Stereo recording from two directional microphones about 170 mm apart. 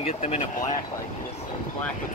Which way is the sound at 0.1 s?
40° left (ahead or behind).